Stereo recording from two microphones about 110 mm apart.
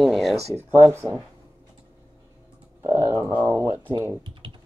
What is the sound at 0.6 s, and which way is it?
Speech, 20° right (ahead or behind).